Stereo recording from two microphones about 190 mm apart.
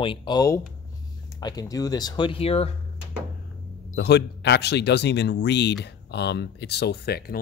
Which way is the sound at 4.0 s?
60° left (ahead or behind).